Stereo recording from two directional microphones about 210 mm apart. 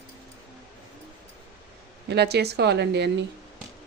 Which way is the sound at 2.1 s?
50° right (ahead or behind).